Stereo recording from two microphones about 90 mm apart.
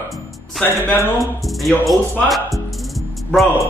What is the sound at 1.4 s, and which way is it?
Speech, centre (ahead or behind).